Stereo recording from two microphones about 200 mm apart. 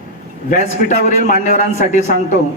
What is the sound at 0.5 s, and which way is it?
A man's voice, 40° left (ahead or behind).